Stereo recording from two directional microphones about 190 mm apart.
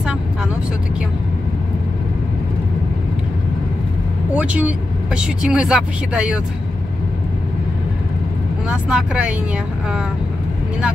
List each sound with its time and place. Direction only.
4.4 s speech: 5° right (ahead or behind)
8.6 s speech: 5° right (ahead or behind)